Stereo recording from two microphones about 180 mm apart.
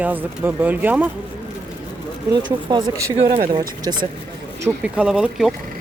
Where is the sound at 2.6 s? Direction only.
25° right (ahead or behind).